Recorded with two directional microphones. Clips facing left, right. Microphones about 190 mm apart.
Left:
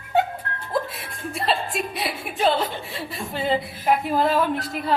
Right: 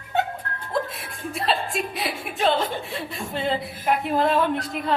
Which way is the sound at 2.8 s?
Centre (ahead or behind).